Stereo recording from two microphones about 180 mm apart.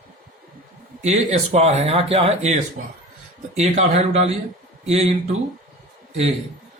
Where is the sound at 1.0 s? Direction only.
40° right (ahead or behind).